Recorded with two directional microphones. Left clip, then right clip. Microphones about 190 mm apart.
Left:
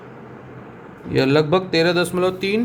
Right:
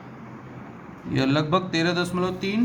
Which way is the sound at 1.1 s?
25° left (ahead or behind).